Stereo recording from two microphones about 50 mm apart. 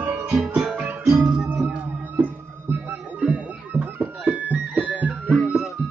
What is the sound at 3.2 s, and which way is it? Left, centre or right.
Music, right.